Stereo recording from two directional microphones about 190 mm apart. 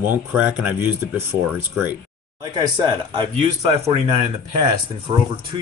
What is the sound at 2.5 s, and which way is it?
Speech, 25° right (ahead or behind).